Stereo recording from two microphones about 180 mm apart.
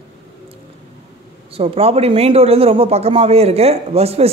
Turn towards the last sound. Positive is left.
turn(degrees=-35)  # may be behind; listen again after turning